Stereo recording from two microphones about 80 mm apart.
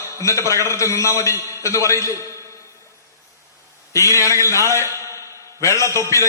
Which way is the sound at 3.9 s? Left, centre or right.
Left.